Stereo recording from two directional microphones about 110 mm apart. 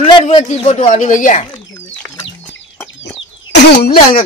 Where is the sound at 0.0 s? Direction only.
80° left.